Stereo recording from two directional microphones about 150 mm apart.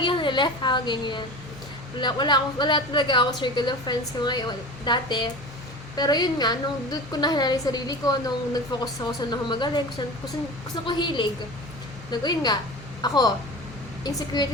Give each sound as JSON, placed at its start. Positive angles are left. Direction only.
{"t": 0.0, "sound": "a woman's voice", "side_deg": 30}
{"t": 10.8, "sound": "a woman's voice", "side_deg": 30}